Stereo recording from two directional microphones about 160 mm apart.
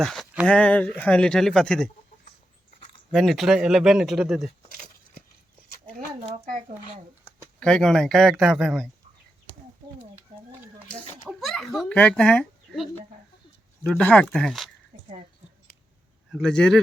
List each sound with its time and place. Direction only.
0.0 s speech: centre (ahead or behind)
3.1 s speech: centre (ahead or behind)
5.8 s a sound: 40° right (ahead or behind)
6.4 s speech: 55° right (ahead or behind)
7.6 s speech: 5° left (ahead or behind)
11.3 s speech: centre (ahead or behind)
13.9 s speech: 5° left (ahead or behind)
16.3 s speech: 5° left (ahead or behind)